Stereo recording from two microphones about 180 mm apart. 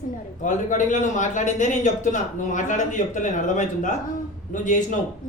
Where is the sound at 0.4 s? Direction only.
45° left (ahead or behind).